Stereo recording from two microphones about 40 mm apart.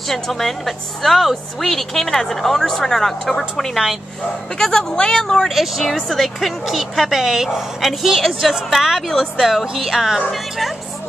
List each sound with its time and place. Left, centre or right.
0.1 s a woman's voice: centre
4.6 s a woman's voice: centre
5.5 s a woman's voice: centre